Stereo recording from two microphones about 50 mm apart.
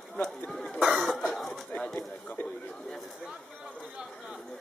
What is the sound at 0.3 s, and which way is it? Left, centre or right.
Cough, centre.